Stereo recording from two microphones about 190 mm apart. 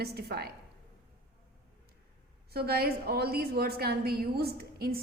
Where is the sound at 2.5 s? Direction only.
55° right (ahead or behind).